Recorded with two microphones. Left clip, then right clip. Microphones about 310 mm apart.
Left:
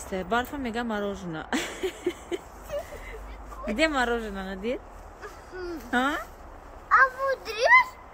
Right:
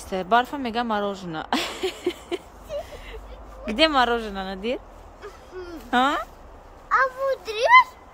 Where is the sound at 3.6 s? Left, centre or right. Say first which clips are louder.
Right 5 dB; centre.